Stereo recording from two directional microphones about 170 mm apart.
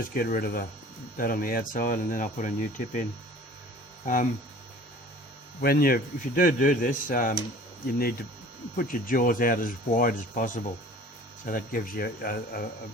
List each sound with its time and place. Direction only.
0.1 s speech: 55° left (ahead or behind)
5.6 s speech: 60° left (ahead or behind)
8.7 s speech: 55° left (ahead or behind)